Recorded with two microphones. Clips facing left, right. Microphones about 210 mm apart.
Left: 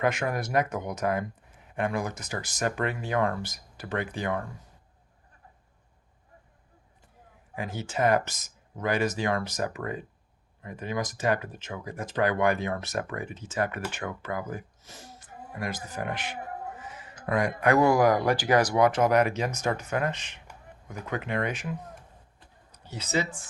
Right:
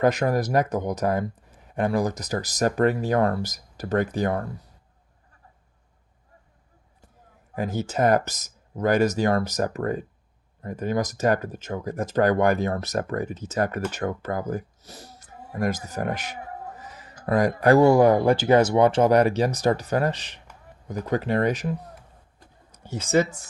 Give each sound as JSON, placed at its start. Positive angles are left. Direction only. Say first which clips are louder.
{"t": 0.0, "sound": "speech", "louder": "right 6 dB", "side_deg": -35}
{"t": 7.5, "sound": "speech", "louder": "right 6 dB", "side_deg": -40}
{"t": 22.4, "sound": "a sound", "louder": "right 3 dB", "side_deg": -45}